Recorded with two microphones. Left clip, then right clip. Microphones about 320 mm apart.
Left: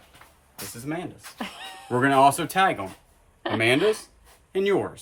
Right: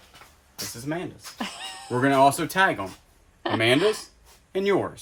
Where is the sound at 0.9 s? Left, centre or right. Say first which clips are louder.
Even; centre.